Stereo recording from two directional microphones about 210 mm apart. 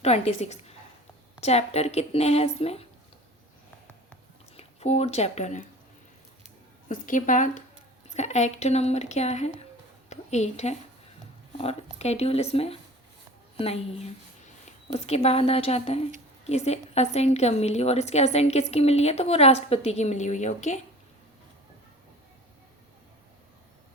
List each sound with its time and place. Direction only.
0.0 s a woman's voice: 30° left (ahead or behind)
4.5 s speech: 30° left (ahead or behind)
6.8 s a woman's voice: 40° left (ahead or behind)